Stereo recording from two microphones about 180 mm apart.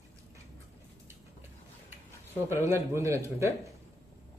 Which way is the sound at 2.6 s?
15° right (ahead or behind).